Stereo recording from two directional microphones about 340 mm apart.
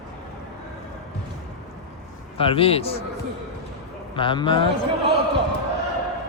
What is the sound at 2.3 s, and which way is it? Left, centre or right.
Speech, centre.